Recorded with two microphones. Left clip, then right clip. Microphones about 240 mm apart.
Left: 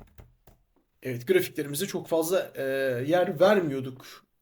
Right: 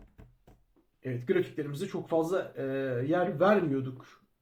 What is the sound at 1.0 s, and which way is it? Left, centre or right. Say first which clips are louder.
Speech: left 5 dB; left.